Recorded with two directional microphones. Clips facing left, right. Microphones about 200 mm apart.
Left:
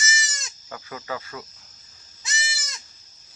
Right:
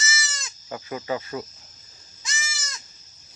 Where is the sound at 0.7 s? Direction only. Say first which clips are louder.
Right 5 dB; 20° right (ahead or behind).